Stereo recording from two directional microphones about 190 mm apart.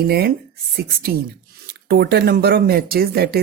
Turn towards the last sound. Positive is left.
turn(degrees=-55)  # may be behind; listen again after turning